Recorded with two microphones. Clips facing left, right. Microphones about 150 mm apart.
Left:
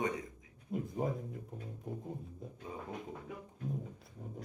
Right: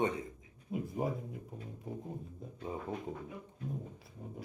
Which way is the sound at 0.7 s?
5° right (ahead or behind).